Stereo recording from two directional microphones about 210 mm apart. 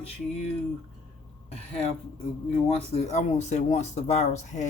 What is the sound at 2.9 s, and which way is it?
Speech, 30° left (ahead or behind).